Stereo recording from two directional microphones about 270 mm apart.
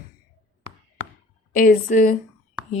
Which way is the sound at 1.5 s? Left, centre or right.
Left.